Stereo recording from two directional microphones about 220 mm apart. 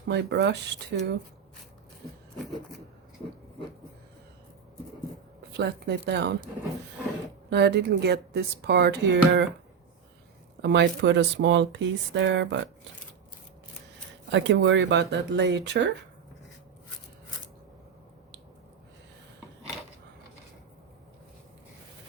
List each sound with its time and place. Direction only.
0.1 s speech: 50° right (ahead or behind)
5.5 s speech: 50° right (ahead or behind)
7.5 s speech: 50° right (ahead or behind)
10.6 s speech: 50° right (ahead or behind)
14.3 s speech: 55° right (ahead or behind)